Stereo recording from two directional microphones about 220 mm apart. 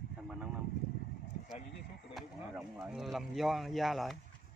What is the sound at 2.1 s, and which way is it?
Speech, 5° right (ahead or behind).